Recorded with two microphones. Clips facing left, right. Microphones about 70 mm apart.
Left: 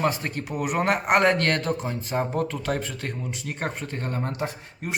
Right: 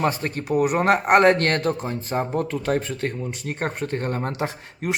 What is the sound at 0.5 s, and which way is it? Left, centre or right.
Speech, centre.